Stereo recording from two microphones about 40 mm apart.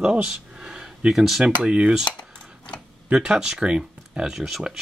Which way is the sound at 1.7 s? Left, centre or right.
Right.